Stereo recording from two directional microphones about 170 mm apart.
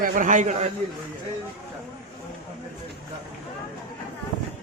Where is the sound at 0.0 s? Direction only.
55° right (ahead or behind).